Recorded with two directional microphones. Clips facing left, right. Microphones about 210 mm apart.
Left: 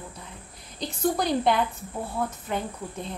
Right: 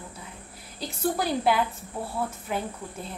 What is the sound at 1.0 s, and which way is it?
A woman's voice, 5° right (ahead or behind).